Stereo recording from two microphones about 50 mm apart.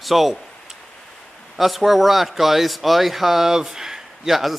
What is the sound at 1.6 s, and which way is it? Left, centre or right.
Speech, centre.